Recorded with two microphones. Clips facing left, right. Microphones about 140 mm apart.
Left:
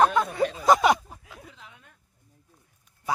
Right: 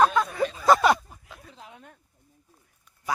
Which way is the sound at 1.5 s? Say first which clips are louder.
Right 5 dB; 40° right (ahead or behind).